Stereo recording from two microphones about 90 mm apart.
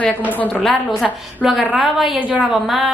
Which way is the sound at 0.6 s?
Centre (ahead or behind).